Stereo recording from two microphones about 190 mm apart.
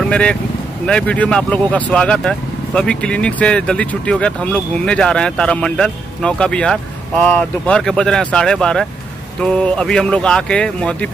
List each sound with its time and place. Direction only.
0.0 s speech: 5° left (ahead or behind)